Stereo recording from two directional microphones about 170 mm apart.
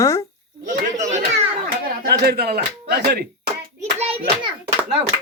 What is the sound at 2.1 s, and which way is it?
Speech, 70° right (ahead or behind).